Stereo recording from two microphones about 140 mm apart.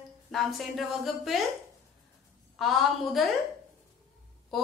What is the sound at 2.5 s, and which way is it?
Speech, centre (ahead or behind).